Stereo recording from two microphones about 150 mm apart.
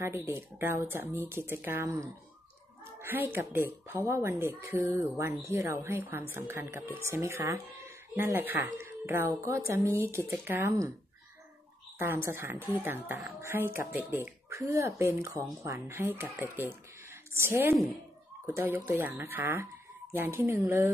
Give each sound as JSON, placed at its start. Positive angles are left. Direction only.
{"t": 0.0, "sound": "speech", "side_deg": -15}
{"t": 12.0, "sound": "speech", "side_deg": -15}